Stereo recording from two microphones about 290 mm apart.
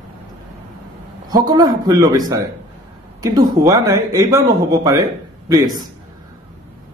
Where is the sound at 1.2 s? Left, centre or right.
Centre.